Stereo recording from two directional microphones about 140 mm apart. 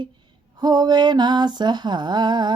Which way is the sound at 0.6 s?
30° right (ahead or behind).